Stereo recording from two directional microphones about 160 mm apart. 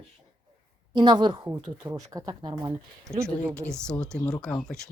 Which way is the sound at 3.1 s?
Centre (ahead or behind).